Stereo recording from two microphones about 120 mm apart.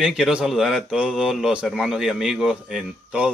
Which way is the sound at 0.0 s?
5° right (ahead or behind).